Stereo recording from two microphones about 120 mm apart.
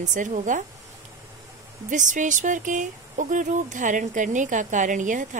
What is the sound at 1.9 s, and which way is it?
Speech, 90° right.